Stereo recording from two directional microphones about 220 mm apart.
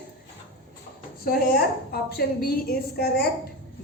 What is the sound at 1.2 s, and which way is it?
A woman's voice, 45° left (ahead or behind).